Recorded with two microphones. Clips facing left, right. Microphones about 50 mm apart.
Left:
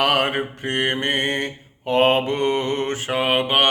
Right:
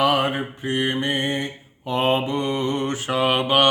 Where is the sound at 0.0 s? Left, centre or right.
Left.